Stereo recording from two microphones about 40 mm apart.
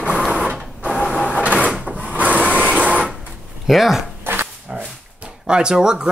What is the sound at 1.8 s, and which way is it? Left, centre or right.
Printer, right.